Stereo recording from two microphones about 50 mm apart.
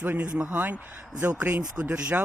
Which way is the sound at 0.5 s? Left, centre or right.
Right.